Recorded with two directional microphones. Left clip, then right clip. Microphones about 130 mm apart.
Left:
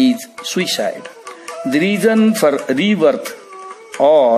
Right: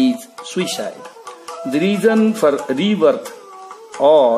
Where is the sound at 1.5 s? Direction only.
10° left (ahead or behind).